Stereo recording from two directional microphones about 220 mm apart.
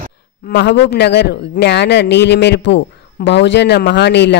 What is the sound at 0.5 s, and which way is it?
A man's voice, 50° left (ahead or behind).